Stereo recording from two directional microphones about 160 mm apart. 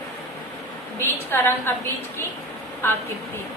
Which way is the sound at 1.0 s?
15° left (ahead or behind).